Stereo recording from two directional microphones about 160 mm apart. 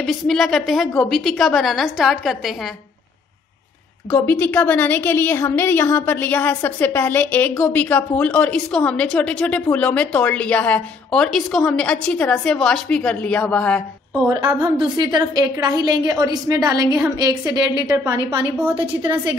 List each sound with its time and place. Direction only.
0.0 s a woman's voice: centre (ahead or behind)
4.1 s a woman's voice: 10° left (ahead or behind)
14.2 s a woman's voice: 15° right (ahead or behind)